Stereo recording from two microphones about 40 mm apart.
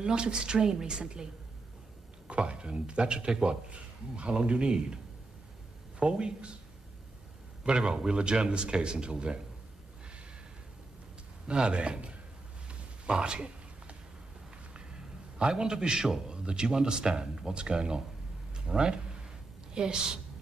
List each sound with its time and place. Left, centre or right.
0.0 s a man's voice: right
2.2 s a man's voice: right
5.9 s a man's voice: right
7.6 s a man's voice: centre
11.4 s speech: right
12.6 s a sound: right
16.3 s a man's voice: right